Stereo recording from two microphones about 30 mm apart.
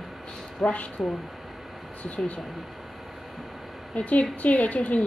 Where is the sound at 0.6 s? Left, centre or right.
Left.